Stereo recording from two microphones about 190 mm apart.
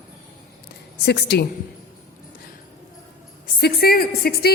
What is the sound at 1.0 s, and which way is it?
Speech, 60° left (ahead or behind).